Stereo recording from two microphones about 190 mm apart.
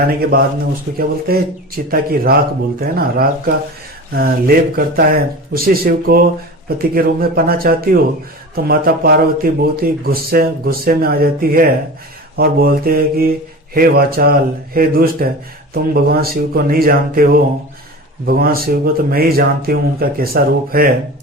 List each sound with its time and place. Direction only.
0.1 s speech: 55° right (ahead or behind)